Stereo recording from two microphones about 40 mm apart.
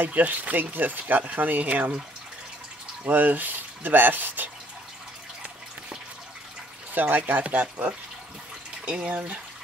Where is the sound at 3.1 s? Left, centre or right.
Right.